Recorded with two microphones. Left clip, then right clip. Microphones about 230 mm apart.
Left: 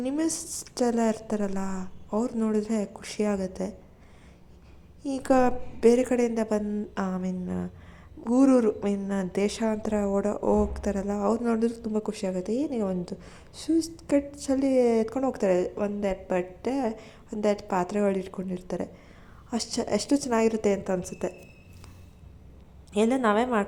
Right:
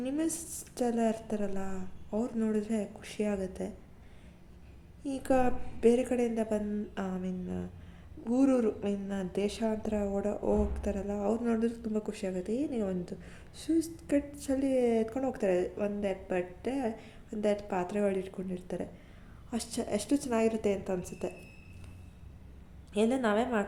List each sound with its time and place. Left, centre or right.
0.0 s a woman's voice: centre
5.0 s a woman's voice: centre
22.9 s a woman's voice: centre